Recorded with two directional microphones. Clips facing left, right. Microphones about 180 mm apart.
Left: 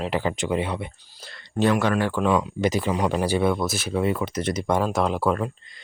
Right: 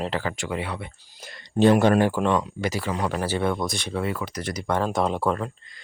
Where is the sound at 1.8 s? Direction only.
20° right (ahead or behind).